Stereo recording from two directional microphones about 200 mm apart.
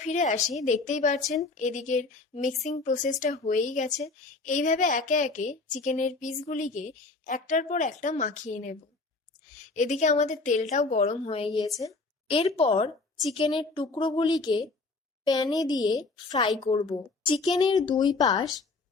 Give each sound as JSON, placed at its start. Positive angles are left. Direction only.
{"t": 0.0, "sound": "speech", "side_deg": 35}
{"t": 12.4, "sound": "a woman's voice", "side_deg": 30}